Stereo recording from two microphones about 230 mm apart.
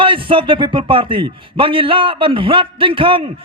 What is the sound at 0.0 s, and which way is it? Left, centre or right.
Speech, right.